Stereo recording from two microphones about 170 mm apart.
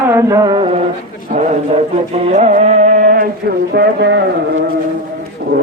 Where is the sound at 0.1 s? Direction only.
20° right (ahead or behind).